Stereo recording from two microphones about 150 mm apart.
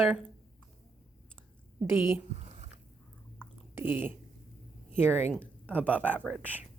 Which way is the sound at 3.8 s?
15° right (ahead or behind).